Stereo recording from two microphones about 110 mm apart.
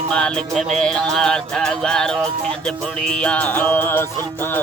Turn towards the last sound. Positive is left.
turn(degrees=20)  # may be behind; listen again after turning